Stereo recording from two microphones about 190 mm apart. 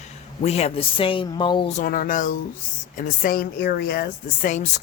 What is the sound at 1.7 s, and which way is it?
A woman's voice, 45° left (ahead or behind).